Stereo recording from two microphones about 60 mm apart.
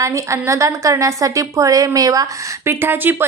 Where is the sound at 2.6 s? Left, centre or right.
Right.